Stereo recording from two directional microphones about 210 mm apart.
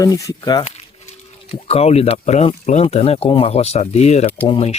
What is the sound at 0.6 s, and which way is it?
Speech, 30° left (ahead or behind).